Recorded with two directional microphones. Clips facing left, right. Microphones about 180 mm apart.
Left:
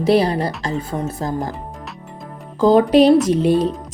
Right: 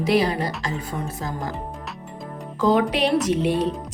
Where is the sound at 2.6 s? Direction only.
35° left (ahead or behind).